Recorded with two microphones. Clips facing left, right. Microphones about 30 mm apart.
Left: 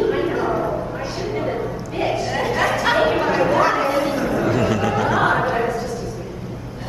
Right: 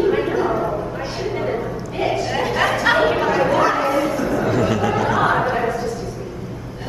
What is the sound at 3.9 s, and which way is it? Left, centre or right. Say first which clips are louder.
Bow-wow: right 1 dB; left.